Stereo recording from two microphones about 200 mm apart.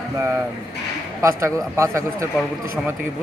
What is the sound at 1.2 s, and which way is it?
Speech, 15° right (ahead or behind).